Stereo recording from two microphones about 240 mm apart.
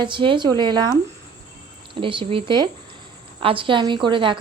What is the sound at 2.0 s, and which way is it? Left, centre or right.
A woman's voice, right.